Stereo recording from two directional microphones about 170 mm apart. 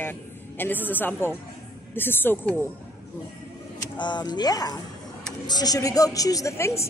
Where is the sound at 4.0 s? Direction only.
25° left (ahead or behind).